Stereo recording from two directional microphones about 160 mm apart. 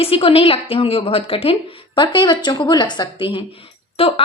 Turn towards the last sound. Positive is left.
turn(degrees=35)  # may be behind; listen again after turning